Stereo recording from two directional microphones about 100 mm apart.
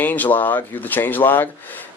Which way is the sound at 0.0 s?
15° left (ahead or behind).